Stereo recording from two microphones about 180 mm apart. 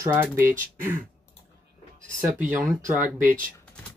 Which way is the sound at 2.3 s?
10° right (ahead or behind).